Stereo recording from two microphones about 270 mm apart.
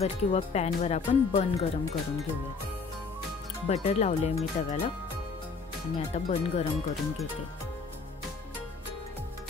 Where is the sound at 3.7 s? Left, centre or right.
Left.